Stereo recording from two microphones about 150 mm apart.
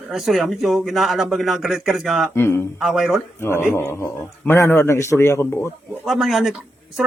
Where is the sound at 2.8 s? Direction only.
Centre (ahead or behind).